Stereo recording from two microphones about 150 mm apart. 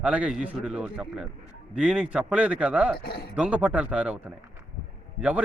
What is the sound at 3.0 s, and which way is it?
Speech, 90° left.